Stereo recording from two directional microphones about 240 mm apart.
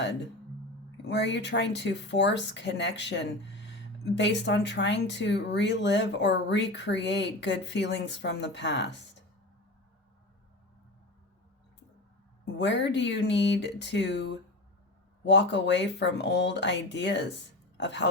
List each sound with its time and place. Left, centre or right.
0.9 s speech: left
12.5 s speech: left